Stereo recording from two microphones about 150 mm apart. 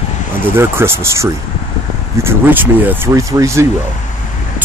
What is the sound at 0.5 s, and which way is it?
Speech, 15° right (ahead or behind).